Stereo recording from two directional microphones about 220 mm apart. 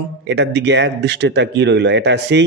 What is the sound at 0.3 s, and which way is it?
Speech, 50° right (ahead or behind).